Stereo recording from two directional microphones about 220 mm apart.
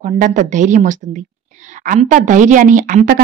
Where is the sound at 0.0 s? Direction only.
35° right (ahead or behind).